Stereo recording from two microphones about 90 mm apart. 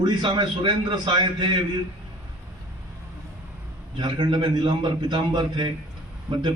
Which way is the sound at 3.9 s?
60° right (ahead or behind).